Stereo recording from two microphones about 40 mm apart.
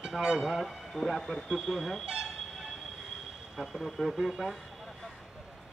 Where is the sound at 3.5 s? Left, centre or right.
Centre.